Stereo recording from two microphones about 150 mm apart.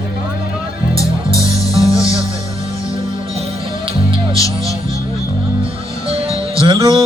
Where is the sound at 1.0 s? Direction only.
20° left (ahead or behind).